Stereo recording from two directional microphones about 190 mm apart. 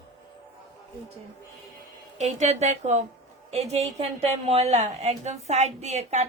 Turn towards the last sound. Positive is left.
turn(degrees=-35)  # may be behind; listen again after turning